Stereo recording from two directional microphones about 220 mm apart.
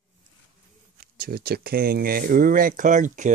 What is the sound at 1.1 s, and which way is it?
Speech, 45° right (ahead or behind).